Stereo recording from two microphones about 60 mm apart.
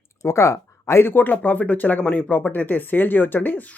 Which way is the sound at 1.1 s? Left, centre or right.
Left.